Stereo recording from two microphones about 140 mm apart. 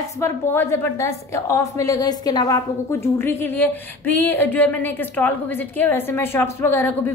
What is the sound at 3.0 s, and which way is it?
A woman's voice, 15° left (ahead or behind).